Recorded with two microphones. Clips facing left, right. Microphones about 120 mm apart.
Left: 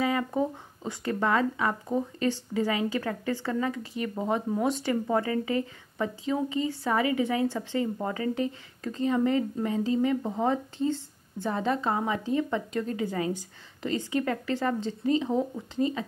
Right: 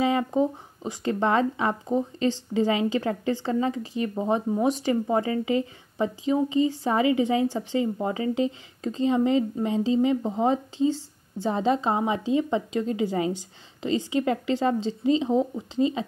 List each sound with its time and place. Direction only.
0.0 s speech: 25° right (ahead or behind)